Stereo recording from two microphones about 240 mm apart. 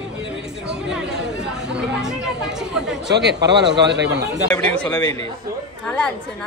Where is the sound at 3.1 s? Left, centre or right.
Right.